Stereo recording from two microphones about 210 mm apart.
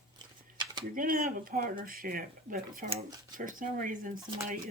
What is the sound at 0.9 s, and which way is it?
Speech, 40° right (ahead or behind).